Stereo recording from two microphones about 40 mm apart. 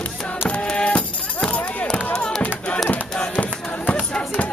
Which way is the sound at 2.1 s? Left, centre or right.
Centre.